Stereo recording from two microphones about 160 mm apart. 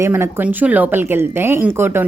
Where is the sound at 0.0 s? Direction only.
15° right (ahead or behind).